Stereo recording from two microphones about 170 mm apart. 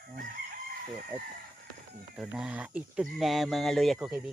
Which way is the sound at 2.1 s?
5° right (ahead or behind).